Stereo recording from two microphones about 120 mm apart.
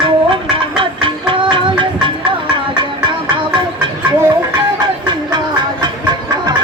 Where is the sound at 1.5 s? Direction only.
40° right (ahead or behind).